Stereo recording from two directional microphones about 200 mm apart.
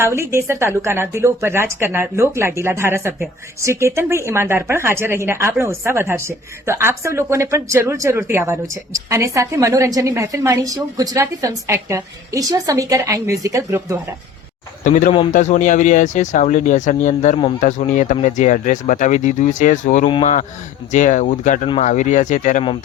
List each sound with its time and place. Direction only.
0.0 s speech: 15° right (ahead or behind)
14.8 s speech: 40° left (ahead or behind)